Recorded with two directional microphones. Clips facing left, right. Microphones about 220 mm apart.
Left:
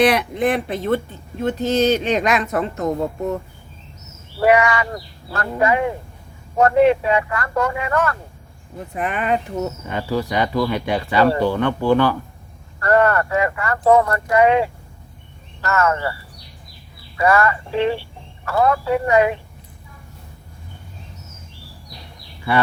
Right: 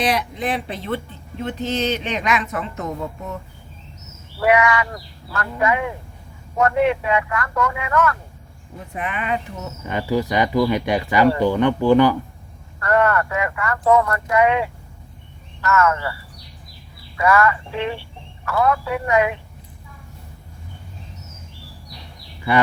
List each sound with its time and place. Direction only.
0.0 s speech: 60° left (ahead or behind); by 9.4 s 40° left (ahead or behind)
10.0 s speech: 15° right (ahead or behind)
12.8 s speech: 35° left (ahead or behind)
17.2 s speech: 35° left (ahead or behind)